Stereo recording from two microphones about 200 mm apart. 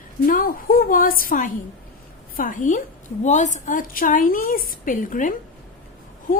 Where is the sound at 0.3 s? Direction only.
45° left (ahead or behind).